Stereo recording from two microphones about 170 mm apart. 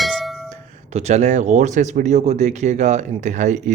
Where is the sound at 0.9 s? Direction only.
40° right (ahead or behind).